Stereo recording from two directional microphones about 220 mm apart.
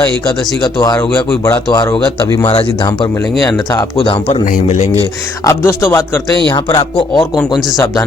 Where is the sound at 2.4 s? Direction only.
25° left (ahead or behind).